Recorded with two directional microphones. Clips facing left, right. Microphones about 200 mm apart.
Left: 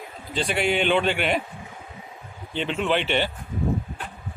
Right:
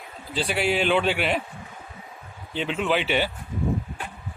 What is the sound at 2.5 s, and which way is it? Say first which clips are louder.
Speech: even; 5° right (ahead or behind).